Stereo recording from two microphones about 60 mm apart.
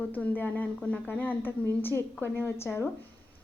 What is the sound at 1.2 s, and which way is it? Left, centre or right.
A woman's voice, left.